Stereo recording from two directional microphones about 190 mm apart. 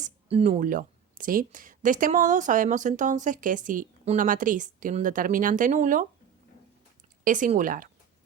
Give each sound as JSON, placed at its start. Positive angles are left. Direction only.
{"t": 0.0, "sound": "speech", "side_deg": -35}
{"t": 7.3, "sound": "speech", "side_deg": -45}